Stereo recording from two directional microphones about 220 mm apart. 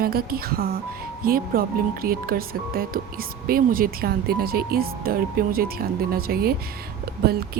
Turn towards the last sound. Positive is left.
turn(degrees=-45)  # may be behind; listen again after turning